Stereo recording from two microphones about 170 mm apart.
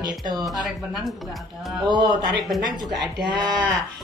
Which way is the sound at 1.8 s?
25° right (ahead or behind).